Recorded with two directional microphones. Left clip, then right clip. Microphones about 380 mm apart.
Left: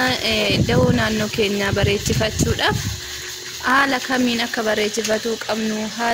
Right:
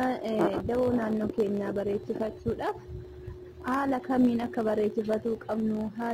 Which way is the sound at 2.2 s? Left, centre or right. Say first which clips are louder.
Left 12 dB; right.